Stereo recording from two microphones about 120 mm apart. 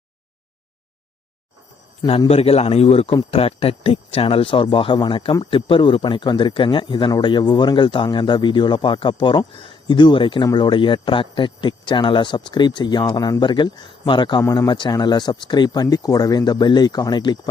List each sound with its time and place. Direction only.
2.0 s speech: 50° left (ahead or behind)